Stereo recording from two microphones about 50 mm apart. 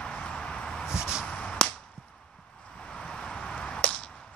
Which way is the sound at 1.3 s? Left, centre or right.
Left.